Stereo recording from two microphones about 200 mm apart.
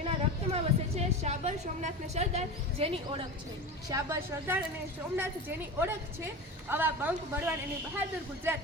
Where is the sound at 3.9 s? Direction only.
15° right (ahead or behind).